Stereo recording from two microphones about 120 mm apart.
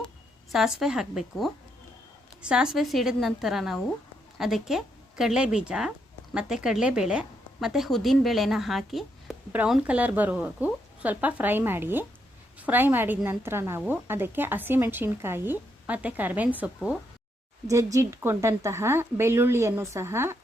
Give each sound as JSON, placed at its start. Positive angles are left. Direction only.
{"t": 0.5, "sound": "a woman's voice", "side_deg": -5}
{"t": 17.7, "sound": "a woman's voice", "side_deg": -25}